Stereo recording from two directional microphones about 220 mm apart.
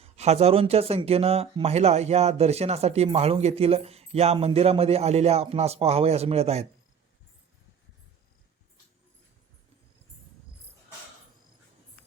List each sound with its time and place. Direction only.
0.0 s speech: 30° right (ahead or behind)